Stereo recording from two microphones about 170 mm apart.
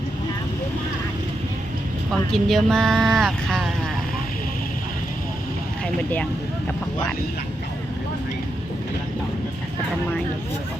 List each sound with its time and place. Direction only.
2.3 s speech: centre (ahead or behind)
5.8 s speech: 10° left (ahead or behind)